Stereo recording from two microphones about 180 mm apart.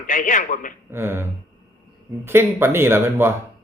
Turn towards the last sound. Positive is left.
turn(degrees=-15)  # may be behind; listen again after turning